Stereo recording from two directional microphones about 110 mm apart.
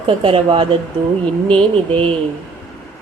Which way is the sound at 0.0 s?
50° right (ahead or behind).